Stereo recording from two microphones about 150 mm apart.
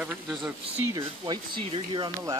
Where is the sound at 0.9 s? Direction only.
30° right (ahead or behind).